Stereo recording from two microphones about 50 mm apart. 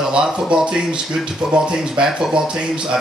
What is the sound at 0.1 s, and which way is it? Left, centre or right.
Speech, centre.